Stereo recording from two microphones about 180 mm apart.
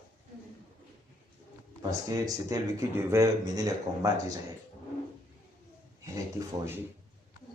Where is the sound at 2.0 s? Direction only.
20° right (ahead or behind).